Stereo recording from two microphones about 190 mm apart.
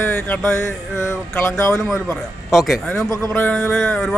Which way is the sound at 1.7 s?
Centre (ahead or behind).